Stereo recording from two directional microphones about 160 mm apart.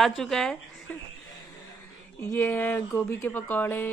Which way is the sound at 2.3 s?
15° left (ahead or behind).